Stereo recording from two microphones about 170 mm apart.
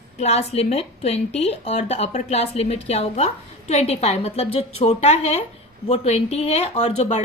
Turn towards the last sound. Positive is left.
turn(degrees=40)  # may be behind; listen again after turning